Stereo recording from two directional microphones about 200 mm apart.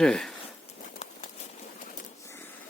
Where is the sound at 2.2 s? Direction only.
10° left (ahead or behind).